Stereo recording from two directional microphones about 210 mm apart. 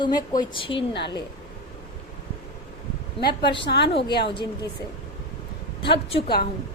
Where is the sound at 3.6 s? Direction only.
55° left (ahead or behind).